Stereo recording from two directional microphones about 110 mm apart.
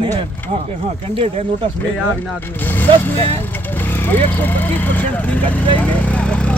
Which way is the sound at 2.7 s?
20° left (ahead or behind).